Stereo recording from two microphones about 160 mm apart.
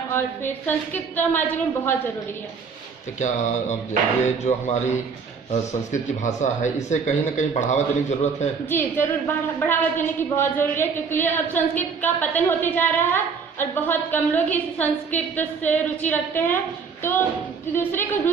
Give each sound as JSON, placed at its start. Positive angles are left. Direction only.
{"t": 0.1, "sound": "a woman's voice", "side_deg": 15}
{"t": 3.2, "sound": "speech", "side_deg": 50}
{"t": 8.6, "sound": "a woman's voice", "side_deg": 15}
{"t": 17.7, "sound": "a woman's voice", "side_deg": 15}